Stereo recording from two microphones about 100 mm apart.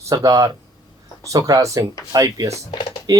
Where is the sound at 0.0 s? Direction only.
30° right (ahead or behind).